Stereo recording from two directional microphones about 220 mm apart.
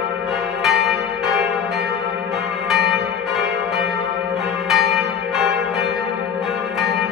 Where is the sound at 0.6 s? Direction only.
Centre (ahead or behind).